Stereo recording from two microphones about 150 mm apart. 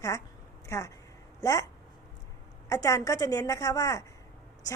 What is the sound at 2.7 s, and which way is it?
A woman's voice, 20° left (ahead or behind).